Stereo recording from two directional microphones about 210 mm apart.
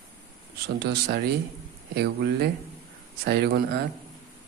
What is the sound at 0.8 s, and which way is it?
Speech, 50° right (ahead or behind).